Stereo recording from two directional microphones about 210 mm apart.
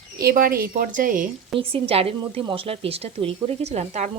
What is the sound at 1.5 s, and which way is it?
A woman's voice, 25° right (ahead or behind).